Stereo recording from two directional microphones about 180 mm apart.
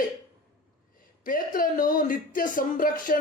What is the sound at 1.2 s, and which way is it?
Speech, 50° left (ahead or behind).